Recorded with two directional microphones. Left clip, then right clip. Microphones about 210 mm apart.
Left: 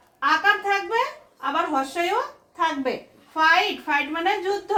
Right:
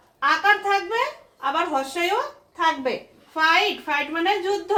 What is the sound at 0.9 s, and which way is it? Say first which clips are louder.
A woman's voice: even; 15° left (ahead or behind).